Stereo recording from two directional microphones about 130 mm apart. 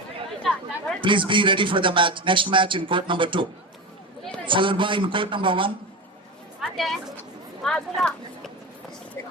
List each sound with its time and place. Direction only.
1.0 s speech: 40° right (ahead or behind)
4.4 s speech: 40° right (ahead or behind)
6.6 s speech: centre (ahead or behind)